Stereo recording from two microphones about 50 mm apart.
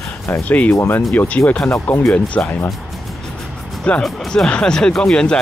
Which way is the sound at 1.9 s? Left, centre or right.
Left.